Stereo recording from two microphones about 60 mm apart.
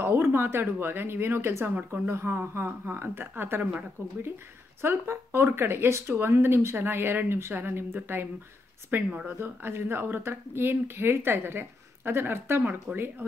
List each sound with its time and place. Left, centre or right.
0.0 s a woman's voice: right
4.8 s a woman's voice: right
12.9 s speech: right